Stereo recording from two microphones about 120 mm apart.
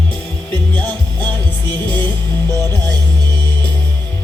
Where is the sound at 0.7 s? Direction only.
15° left (ahead or behind).